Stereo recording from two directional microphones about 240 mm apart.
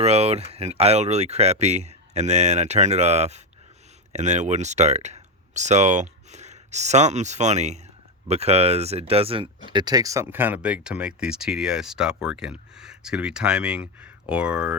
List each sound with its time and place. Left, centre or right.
0.0 s speech: right; by 14.8 s centre